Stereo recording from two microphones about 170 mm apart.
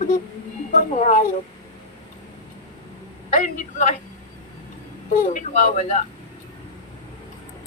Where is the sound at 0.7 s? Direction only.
45° left (ahead or behind).